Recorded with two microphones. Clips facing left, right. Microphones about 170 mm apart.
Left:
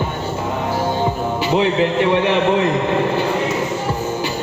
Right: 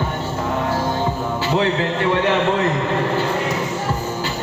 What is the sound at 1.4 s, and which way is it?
A man's voice, 15° left (ahead or behind).